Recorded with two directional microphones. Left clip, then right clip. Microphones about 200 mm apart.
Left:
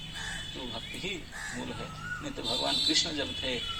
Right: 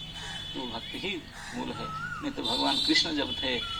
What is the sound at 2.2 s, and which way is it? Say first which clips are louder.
Speech: right 3 dB; 15° right (ahead or behind).